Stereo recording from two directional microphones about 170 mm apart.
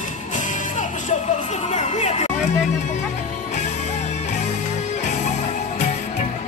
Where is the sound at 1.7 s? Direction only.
40° left (ahead or behind).